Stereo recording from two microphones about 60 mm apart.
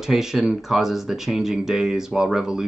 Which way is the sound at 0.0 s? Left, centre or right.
Centre.